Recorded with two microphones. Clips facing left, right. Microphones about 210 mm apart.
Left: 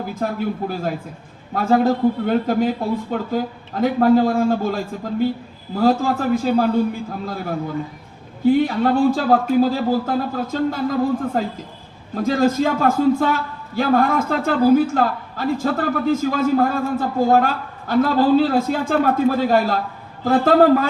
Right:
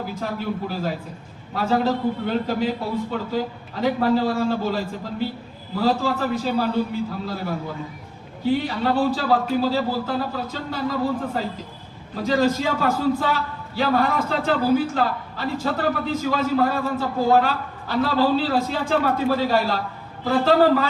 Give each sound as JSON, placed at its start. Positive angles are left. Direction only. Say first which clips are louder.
{"t": 0.1, "sound": "a man's voice", "louder": "left 4 dB", "side_deg": 50}
{"t": 12.1, "sound": "a man's voice", "louder": "left 3 dB", "side_deg": 50}